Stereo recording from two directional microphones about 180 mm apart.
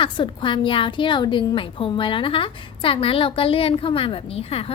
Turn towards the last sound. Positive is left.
turn(degrees=35)  # may be behind; listen again after turning